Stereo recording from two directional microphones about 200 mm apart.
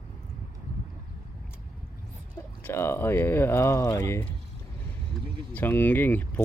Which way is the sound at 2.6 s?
10° left (ahead or behind).